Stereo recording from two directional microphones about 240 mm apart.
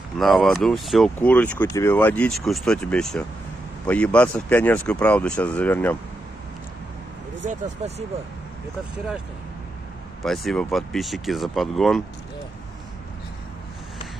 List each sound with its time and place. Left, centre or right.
0.2 s speech: centre
7.4 s speech: right
10.2 s speech: centre